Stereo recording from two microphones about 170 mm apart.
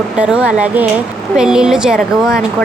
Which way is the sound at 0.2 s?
5° right (ahead or behind).